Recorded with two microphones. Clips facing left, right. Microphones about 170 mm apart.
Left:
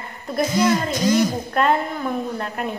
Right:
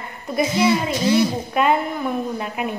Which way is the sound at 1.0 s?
45° left (ahead or behind).